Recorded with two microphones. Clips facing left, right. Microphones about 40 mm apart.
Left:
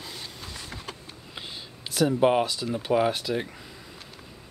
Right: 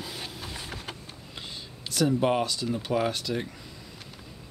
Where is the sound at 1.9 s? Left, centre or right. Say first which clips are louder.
Left 3 dB; centre.